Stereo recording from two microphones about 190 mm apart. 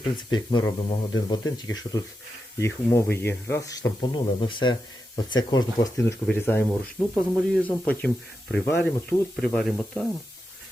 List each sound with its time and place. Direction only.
0.0 s speech: 20° left (ahead or behind); by 10.1 s 5° left (ahead or behind)